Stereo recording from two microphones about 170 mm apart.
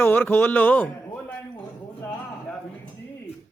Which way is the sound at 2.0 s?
10° left (ahead or behind).